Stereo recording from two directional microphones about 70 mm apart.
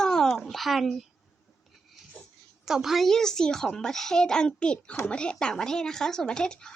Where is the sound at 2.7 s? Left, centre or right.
Centre.